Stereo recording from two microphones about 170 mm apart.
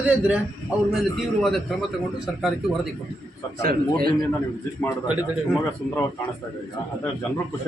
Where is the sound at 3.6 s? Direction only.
60° right (ahead or behind).